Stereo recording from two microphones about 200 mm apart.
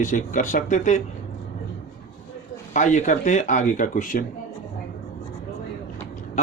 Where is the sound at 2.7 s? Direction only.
40° left (ahead or behind).